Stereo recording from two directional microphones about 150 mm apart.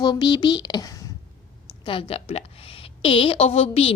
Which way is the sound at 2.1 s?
40° left (ahead or behind).